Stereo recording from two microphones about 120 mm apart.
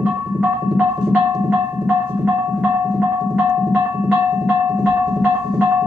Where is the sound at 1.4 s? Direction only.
10° right (ahead or behind).